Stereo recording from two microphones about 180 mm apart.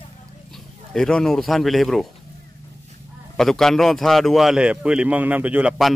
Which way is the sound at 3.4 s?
Centre (ahead or behind).